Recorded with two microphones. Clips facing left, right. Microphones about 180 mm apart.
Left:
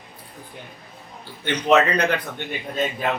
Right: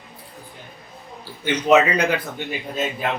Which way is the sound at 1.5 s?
10° right (ahead or behind).